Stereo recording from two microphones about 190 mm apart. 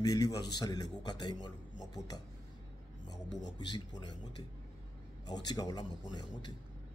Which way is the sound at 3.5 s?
25° left (ahead or behind).